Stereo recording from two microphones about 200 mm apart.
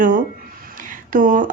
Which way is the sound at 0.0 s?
40° right (ahead or behind).